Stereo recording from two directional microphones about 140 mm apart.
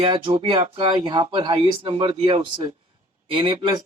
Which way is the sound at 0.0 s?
40° right (ahead or behind).